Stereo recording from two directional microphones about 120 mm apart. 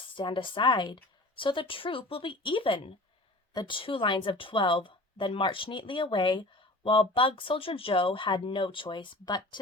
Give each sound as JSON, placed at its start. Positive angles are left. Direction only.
{"t": 0.2, "sound": "a woman's voice", "side_deg": 45}